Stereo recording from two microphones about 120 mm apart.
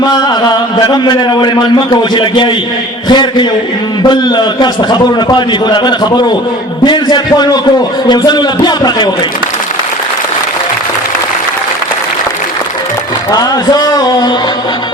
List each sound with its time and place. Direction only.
0.0 s chant: 35° left (ahead or behind)
0.8 s a man's voice: 40° left (ahead or behind)
13.3 s a man's voice: 35° left (ahead or behind)